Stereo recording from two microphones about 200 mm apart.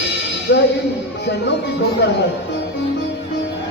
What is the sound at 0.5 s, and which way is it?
Speech, 75° left (ahead or behind).